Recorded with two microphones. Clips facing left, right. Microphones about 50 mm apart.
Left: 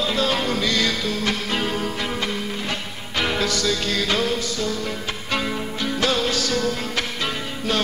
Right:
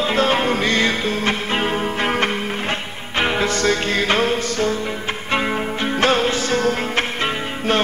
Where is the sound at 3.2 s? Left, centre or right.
Right.